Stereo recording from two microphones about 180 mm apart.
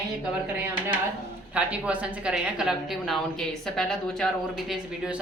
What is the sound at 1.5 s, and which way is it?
Speech, 5° right (ahead or behind).